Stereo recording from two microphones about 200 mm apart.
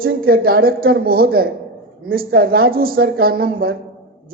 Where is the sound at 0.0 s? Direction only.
50° right (ahead or behind).